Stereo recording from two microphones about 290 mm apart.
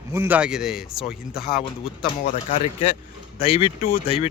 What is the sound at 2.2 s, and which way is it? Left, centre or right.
Speech, left.